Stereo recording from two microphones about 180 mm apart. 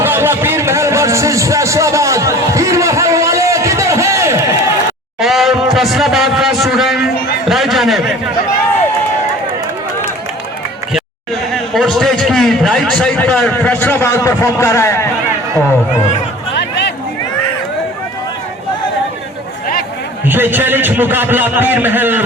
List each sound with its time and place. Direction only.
0.0 s a sound: 10° right (ahead or behind)
5.2 s speech: centre (ahead or behind)
11.5 s a man's voice: centre (ahead or behind)
16.6 s music: 70° left (ahead or behind)
20.2 s a man's voice: 10° right (ahead or behind)